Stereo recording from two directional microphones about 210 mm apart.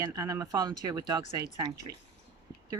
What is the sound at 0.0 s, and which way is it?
Speech, 15° right (ahead or behind).